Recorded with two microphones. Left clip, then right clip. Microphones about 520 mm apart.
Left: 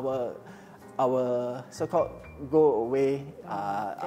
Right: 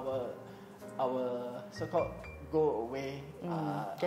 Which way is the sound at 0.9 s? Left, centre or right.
Left.